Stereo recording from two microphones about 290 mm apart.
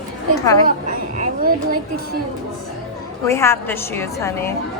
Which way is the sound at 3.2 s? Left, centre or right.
Centre.